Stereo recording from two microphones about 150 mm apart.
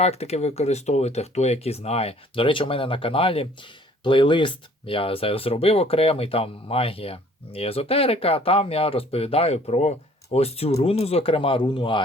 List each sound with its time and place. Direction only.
0.0 s speech: 45° left (ahead or behind)